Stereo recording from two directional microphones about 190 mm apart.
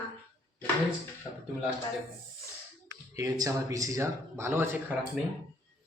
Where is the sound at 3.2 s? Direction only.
20° right (ahead or behind).